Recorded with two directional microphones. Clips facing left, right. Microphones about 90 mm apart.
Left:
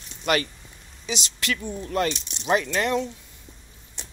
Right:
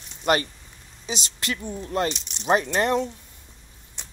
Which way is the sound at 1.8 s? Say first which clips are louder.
Even; 25° right (ahead or behind).